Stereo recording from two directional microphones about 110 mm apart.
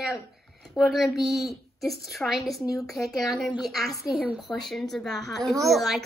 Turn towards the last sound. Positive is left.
turn(degrees=0)  # may be behind; listen again after turning